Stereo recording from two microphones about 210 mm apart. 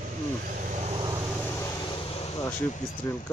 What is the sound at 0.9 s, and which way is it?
Vehicle, 20° right (ahead or behind).